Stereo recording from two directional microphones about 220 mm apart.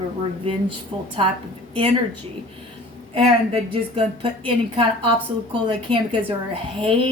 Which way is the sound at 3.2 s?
25° right (ahead or behind).